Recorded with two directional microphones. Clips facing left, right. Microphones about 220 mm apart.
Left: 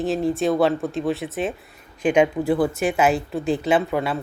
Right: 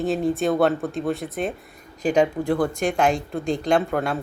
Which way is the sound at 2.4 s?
5° left (ahead or behind).